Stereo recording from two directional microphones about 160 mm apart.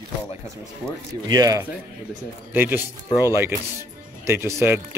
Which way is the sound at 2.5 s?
10° right (ahead or behind).